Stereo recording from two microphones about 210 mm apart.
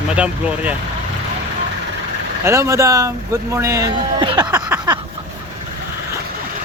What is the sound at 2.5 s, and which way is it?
Speech, 15° right (ahead or behind).